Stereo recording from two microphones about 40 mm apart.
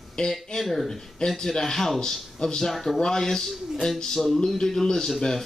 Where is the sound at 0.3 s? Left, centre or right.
Centre.